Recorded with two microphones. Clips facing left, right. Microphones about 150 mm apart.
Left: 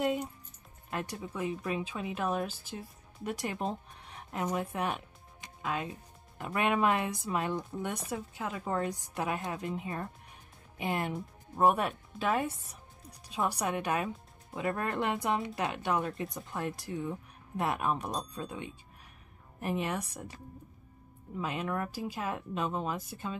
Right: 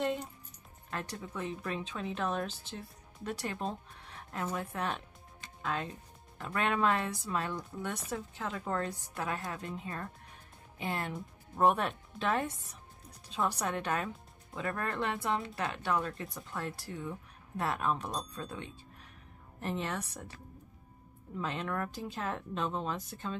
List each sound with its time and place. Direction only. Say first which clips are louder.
0.8 s speech: left 3 dB; 15° left (ahead or behind)
5.6 s music: left 1 dB; 10° left (ahead or behind)
6.4 s speech: left 2 dB; 15° left (ahead or behind)
21.4 s speech: left 2 dB; 10° left (ahead or behind)